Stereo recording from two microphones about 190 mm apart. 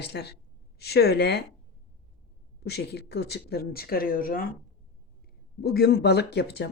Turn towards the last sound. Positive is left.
turn(degrees=60)  # may be behind; listen again after turning